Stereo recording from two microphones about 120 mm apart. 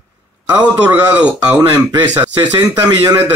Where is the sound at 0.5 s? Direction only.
15° right (ahead or behind).